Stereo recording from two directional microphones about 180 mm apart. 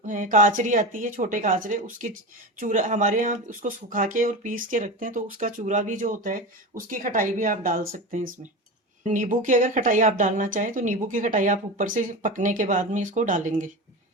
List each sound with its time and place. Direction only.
0.0 s speech: 45° right (ahead or behind)